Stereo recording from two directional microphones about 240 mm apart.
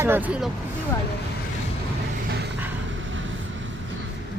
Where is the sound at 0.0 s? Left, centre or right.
Centre.